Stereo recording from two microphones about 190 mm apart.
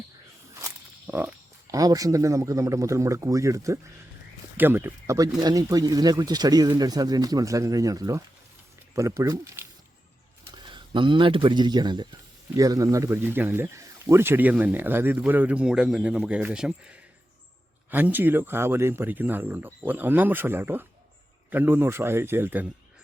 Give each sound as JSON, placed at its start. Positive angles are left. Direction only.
{"t": 0.5, "sound": "speech", "side_deg": -10}